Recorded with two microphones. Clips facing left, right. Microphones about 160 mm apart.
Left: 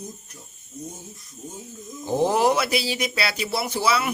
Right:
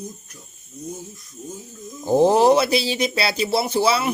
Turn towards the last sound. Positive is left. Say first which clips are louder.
# right 4 dB
turn(degrees=-30)  # may be behind; listen again after turning